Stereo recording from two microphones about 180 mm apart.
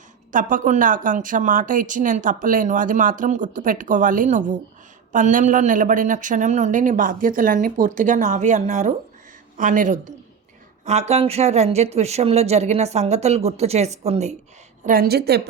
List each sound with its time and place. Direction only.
0.3 s speech: 45° right (ahead or behind)
14.8 s a woman's voice: 55° right (ahead or behind)